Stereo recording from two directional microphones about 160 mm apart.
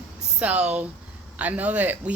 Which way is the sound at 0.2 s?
5° right (ahead or behind).